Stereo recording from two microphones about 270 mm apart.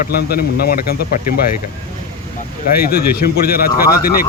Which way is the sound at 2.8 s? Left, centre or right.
Left.